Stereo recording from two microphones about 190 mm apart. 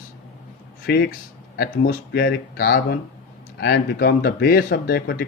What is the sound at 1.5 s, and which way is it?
Speech, 55° left (ahead or behind).